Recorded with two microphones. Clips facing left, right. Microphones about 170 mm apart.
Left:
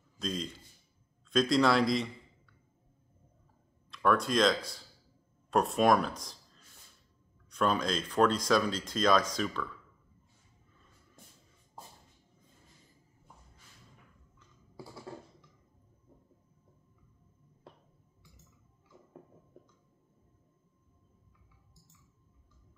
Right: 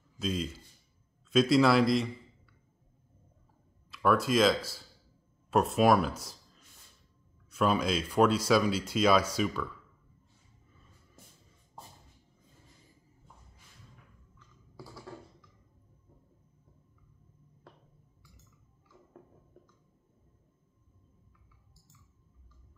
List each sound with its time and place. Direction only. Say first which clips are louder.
0.2 s a man's voice: right 3 dB; 5° right (ahead or behind)
3.9 s speech: right 2 dB; 5° right (ahead or behind)
11.2 s shuffle: even; 5° right (ahead or behind)
14.8 s typing: left 1 dB; 25° left (ahead or behind)